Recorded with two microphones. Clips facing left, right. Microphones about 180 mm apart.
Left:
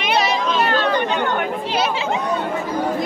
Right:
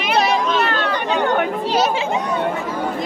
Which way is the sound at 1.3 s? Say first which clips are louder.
Right 3 dB; 45° right (ahead or behind).